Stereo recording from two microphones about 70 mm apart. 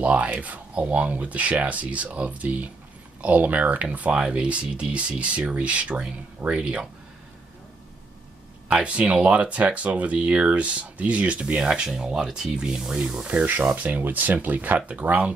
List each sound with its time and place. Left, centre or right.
0.0 s speech: right
8.6 s speech: centre
13.3 s speech: right